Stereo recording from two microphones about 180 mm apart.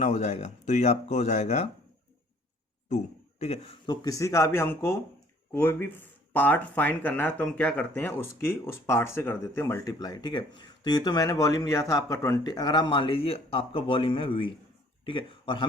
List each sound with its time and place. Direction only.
0.0 s speech: 40° left (ahead or behind)
2.9 s speech: 40° left (ahead or behind)